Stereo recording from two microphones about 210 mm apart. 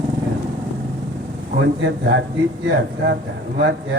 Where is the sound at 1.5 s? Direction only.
55° right (ahead or behind).